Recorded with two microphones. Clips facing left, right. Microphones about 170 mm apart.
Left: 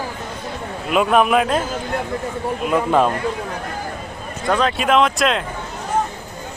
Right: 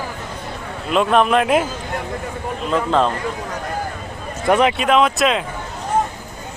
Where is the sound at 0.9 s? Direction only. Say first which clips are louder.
Even; 5° left (ahead or behind).